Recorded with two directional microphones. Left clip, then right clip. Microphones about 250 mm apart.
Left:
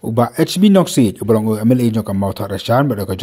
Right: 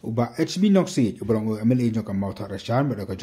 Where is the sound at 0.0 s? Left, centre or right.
Left.